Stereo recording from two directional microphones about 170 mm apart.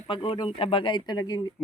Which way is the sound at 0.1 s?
30° left (ahead or behind).